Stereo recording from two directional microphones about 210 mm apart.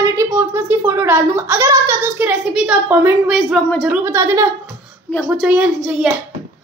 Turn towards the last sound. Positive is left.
turn(degrees=-5)  # may be behind; listen again after turning